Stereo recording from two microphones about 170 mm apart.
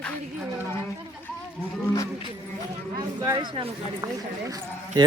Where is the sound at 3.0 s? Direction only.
20° right (ahead or behind).